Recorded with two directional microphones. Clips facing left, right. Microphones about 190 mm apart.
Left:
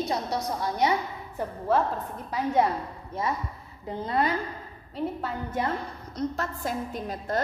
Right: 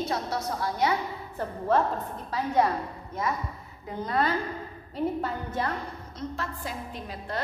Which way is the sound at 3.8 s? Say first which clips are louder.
Left 1 dB; 25° left (ahead or behind).